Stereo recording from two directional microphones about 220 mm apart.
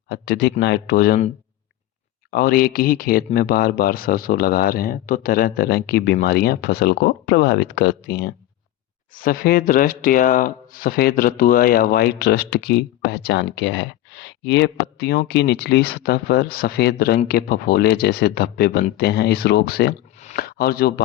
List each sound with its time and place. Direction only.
0.1 s speech: 50° left (ahead or behind)
2.3 s speech: 40° left (ahead or behind)